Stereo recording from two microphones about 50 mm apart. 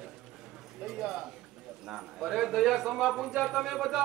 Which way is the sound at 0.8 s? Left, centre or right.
Centre.